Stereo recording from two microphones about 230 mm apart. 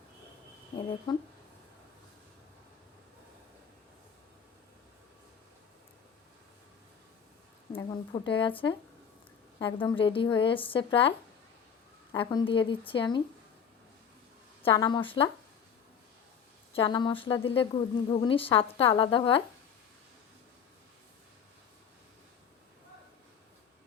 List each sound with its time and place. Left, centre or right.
0.8 s a woman's voice: centre
7.7 s a woman's voice: left
12.1 s a woman's voice: left
14.6 s a woman's voice: centre
16.7 s a woman's voice: centre